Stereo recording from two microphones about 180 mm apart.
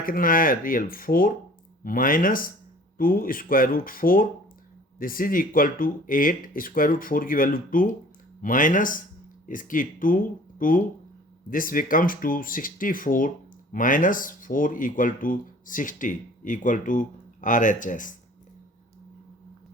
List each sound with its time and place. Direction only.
0.0 s speech: 50° left (ahead or behind)